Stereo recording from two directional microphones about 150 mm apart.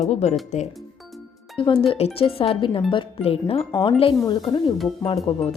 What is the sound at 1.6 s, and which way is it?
Speech, 35° left (ahead or behind).